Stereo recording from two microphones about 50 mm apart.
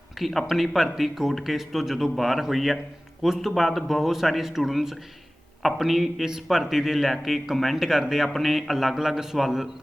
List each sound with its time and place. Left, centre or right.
0.2 s speech: centre
7.9 s speech: centre